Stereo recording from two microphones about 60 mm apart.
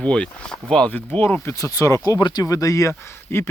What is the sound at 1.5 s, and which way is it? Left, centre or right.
Speech, left.